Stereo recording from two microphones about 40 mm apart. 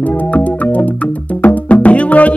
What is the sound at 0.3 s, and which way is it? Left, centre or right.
Music, left.